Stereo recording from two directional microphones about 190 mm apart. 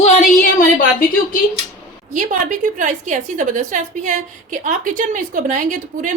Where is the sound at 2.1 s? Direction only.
45° right (ahead or behind).